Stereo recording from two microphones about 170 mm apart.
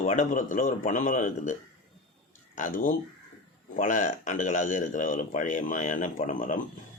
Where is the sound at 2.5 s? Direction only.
50° left (ahead or behind).